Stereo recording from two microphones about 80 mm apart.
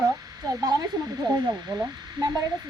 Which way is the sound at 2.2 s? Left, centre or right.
Right.